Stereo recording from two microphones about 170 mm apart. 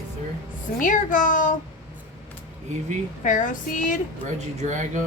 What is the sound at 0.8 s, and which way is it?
Speech, 50° left (ahead or behind).